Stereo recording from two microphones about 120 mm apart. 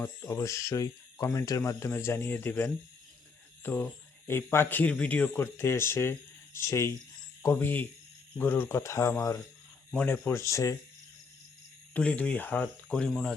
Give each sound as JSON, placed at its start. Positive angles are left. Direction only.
{"t": 0.0, "sound": "speech", "side_deg": 20}
{"t": 11.9, "sound": "speech", "side_deg": 10}